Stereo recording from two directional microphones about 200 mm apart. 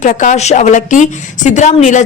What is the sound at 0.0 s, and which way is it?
Speech, 40° left (ahead or behind).